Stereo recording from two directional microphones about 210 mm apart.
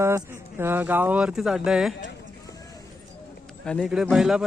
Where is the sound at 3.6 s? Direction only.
Centre (ahead or behind).